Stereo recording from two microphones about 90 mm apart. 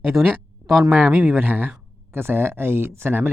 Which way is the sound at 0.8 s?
20° right (ahead or behind).